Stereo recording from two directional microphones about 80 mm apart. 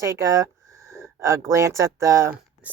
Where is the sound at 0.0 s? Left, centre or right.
Right.